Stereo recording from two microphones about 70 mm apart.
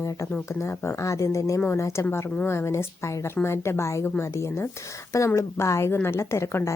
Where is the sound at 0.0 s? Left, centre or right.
Left.